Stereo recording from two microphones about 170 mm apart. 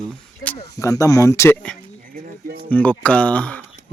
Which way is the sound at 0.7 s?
20° left (ahead or behind).